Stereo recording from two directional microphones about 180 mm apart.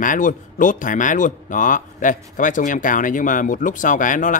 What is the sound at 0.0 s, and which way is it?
Speech, 45° left (ahead or behind).